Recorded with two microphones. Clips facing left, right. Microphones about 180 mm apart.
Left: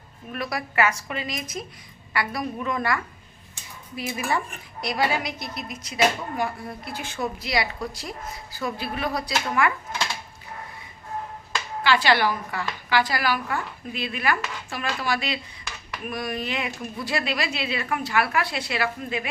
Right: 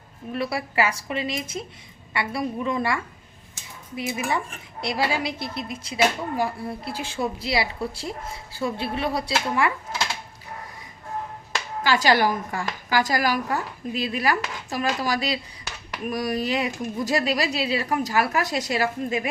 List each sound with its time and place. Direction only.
0.3 s speech: 30° right (ahead or behind)
11.8 s speech: 40° right (ahead or behind)